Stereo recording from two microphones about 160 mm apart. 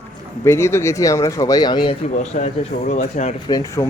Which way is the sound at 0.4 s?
15° left (ahead or behind).